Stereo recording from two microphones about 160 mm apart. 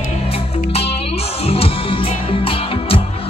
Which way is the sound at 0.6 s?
40° left (ahead or behind).